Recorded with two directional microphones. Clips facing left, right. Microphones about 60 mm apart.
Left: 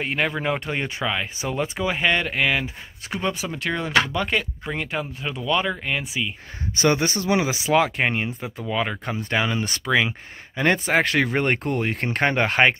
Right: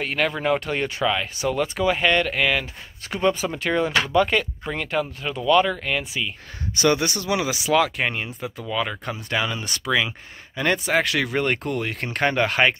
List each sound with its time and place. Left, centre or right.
0.0 s speech: left
3.1 s speech: centre; by 12.7 s left